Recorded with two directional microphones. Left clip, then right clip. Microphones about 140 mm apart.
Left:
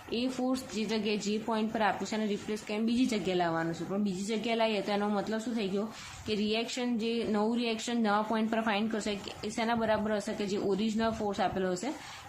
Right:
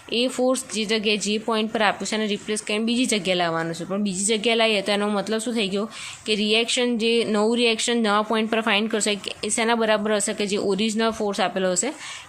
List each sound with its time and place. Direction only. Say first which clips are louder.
0.1 s a woman's voice: right 12 dB; 35° right (ahead or behind)